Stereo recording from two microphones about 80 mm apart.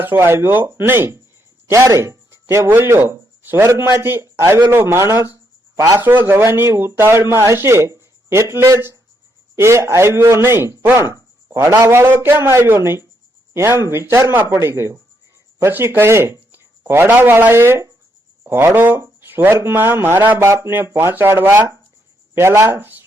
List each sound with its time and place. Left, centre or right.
0.0 s speech: right
11.4 s a sound: right
11.9 s speech: right